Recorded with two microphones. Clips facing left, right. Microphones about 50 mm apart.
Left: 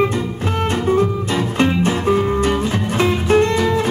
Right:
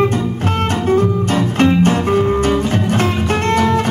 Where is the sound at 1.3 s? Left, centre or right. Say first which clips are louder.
Right 3 dB; right.